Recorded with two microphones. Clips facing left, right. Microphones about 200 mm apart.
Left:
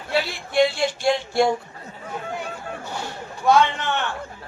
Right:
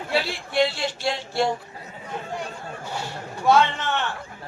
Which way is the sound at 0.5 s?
45° left (ahead or behind).